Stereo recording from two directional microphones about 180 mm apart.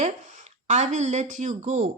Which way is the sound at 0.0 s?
40° right (ahead or behind).